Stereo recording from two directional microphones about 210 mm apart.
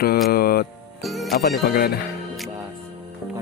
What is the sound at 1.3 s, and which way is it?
Speech, 45° left (ahead or behind).